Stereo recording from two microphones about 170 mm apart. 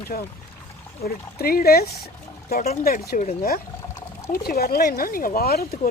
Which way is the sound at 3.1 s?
50° left (ahead or behind).